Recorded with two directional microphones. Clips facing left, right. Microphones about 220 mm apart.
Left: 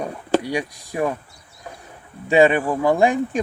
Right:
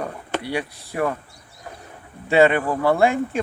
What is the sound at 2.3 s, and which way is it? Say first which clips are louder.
Speech: left 1 dB; 15° left (ahead or behind).